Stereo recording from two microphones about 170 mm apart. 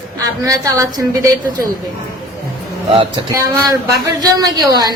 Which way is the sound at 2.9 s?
25° right (ahead or behind).